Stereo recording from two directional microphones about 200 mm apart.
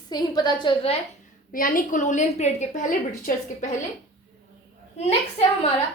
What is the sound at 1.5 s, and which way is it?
A woman's voice, 45° left (ahead or behind).